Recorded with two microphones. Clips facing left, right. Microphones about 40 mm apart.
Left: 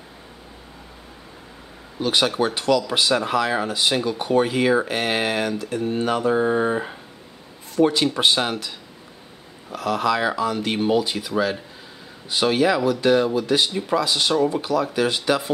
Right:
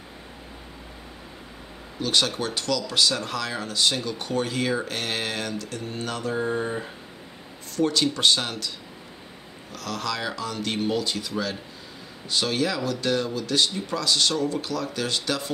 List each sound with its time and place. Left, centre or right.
2.0 s speech: centre